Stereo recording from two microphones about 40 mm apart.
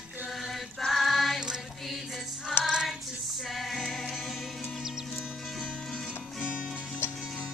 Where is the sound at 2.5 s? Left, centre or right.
Centre.